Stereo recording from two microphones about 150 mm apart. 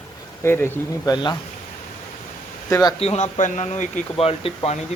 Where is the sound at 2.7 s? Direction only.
25° left (ahead or behind).